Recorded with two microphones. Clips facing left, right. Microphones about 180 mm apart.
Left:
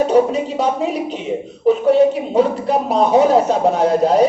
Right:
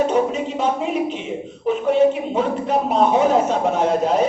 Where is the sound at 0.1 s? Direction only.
35° left (ahead or behind).